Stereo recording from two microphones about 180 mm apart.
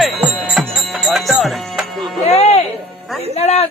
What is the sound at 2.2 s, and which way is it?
Music, 35° left (ahead or behind).